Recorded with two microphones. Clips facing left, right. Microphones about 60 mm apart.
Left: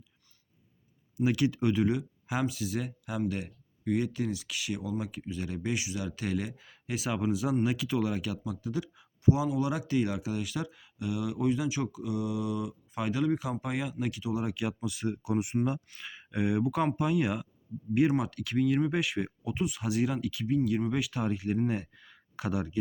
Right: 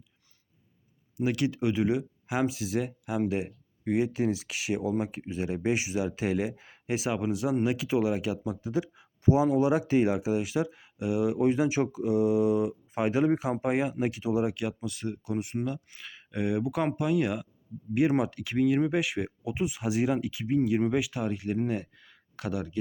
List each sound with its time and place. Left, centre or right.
1.2 s speech: centre
7.1 s speech: centre
9.2 s speech: right
14.5 s speech: centre
18.2 s speech: centre
20.9 s speech: centre